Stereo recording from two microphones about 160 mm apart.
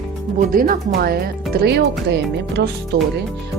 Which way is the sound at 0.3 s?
65° right (ahead or behind).